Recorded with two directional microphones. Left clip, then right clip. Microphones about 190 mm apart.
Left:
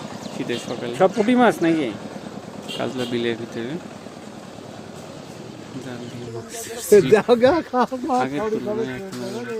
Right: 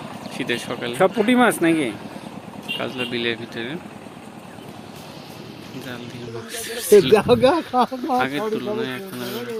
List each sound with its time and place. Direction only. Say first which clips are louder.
0.3 s speech: right 2 dB; 5° left (ahead or behind)
2.7 s speech: left 1 dB; 20° left (ahead or behind)
6.5 s speech: right 1 dB; 10° left (ahead or behind)